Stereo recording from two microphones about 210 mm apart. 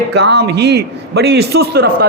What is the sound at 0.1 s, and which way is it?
A man's voice, 55° right (ahead or behind).